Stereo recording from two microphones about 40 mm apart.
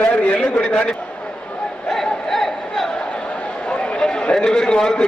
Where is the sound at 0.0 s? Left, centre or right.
Left.